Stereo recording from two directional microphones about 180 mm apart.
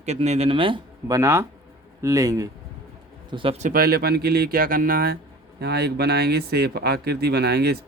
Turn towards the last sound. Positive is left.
turn(degrees=-65)  # may be behind; listen again after turning